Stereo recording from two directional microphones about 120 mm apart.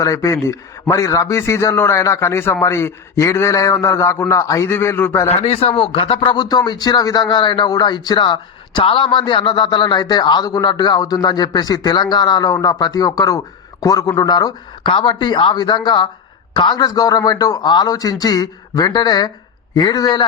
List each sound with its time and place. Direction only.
0.0 s a man's voice: 25° left (ahead or behind)
5.3 s speech: 60° left (ahead or behind); by 20.2 s 35° left (ahead or behind)